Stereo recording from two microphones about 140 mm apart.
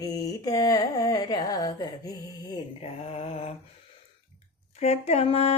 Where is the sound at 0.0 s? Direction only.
25° left (ahead or behind).